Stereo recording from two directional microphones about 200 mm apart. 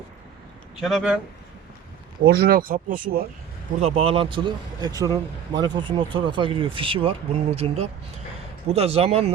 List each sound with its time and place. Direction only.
0.8 s speech: centre (ahead or behind)
2.2 s speech: 50° right (ahead or behind)
3.8 s speech: 30° right (ahead or behind)